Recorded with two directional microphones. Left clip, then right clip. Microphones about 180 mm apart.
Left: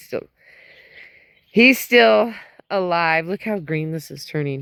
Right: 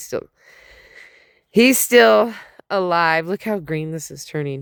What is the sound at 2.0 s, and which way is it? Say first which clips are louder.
Speech: right 1 dB; 90° right.